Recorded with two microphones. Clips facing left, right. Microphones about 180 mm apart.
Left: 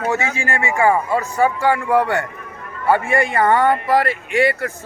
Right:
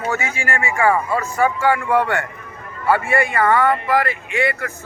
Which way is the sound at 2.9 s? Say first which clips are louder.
Left 1 dB; 25° left (ahead or behind).